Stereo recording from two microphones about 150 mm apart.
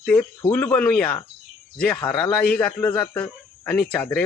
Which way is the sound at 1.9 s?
30° left (ahead or behind).